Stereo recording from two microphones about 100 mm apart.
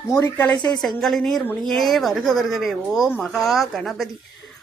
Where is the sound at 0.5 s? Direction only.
45° left (ahead or behind).